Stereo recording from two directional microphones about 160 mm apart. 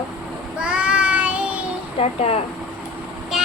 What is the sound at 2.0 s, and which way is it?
Speech, 40° left (ahead or behind).